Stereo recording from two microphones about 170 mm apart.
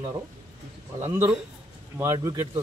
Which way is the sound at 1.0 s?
15° right (ahead or behind).